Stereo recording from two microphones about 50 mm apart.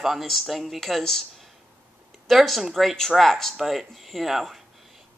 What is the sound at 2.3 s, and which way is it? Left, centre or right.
Speech, centre.